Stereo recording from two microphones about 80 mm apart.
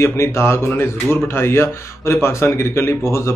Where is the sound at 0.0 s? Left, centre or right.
Left.